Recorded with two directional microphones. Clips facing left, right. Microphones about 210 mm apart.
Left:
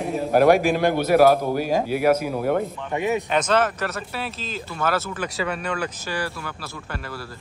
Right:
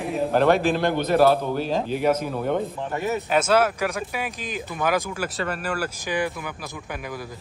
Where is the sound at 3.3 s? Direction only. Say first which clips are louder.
Right 5 dB; 10° right (ahead or behind).